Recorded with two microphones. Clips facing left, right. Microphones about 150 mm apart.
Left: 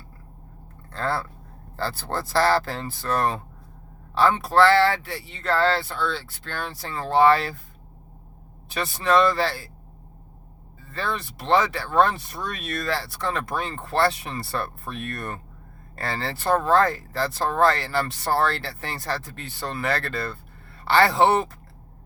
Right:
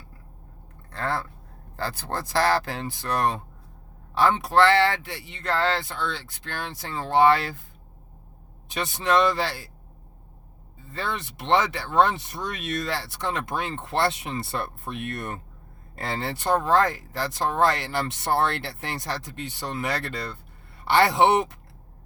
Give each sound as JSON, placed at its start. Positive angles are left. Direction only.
{"t": 1.8, "sound": "speech", "side_deg": -15}
{"t": 8.7, "sound": "speech", "side_deg": -20}
{"t": 10.8, "sound": "speech", "side_deg": -20}